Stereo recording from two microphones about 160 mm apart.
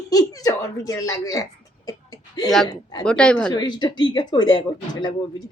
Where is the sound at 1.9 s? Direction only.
25° left (ahead or behind).